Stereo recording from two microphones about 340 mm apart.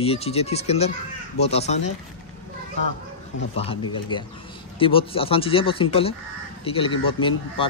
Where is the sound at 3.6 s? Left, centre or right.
Centre.